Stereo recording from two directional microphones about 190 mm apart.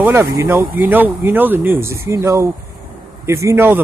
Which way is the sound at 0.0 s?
15° right (ahead or behind).